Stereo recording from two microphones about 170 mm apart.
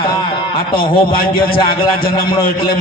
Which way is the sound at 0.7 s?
60° left (ahead or behind).